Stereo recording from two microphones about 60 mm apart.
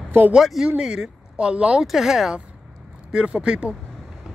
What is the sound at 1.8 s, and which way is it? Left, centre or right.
Speech, centre.